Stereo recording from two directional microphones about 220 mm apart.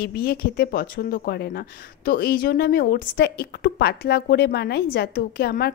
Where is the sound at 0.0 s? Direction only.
45° left (ahead or behind).